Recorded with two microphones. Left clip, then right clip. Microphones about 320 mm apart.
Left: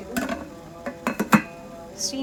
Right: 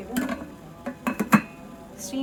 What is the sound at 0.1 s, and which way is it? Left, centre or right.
Music, centre.